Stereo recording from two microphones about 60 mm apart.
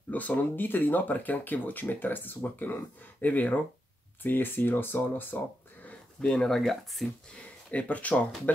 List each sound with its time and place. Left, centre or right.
0.1 s speech: left
5.9 s speech: centre
7.7 s speech: left